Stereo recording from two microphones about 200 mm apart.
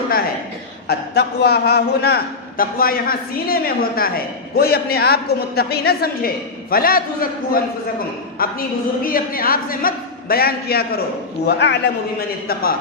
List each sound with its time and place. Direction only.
0.9 s a man's voice: 55° left (ahead or behind)